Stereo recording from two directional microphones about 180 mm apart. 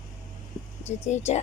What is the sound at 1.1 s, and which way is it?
Speech, 40° left (ahead or behind).